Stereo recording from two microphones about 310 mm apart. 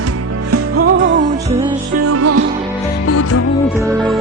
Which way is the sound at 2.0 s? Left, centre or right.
Right.